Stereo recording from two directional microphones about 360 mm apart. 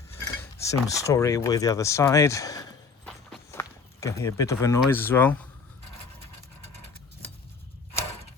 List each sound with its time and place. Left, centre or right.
0.3 s mechanisms: centre
0.9 s speech: centre
3.1 s walk: centre